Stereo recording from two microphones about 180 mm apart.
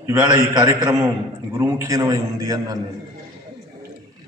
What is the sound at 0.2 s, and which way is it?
A man's voice, 20° right (ahead or behind).